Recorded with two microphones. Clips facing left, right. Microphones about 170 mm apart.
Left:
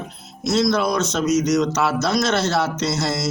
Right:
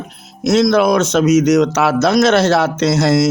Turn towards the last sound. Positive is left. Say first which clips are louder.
# right 9 dB
turn(degrees=-90)